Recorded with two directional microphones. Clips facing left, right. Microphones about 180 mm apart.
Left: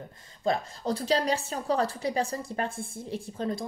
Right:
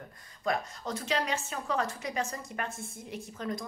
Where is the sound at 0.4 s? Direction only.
30° left (ahead or behind).